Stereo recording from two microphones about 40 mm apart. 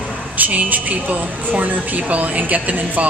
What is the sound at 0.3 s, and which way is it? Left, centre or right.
A woman's voice, right.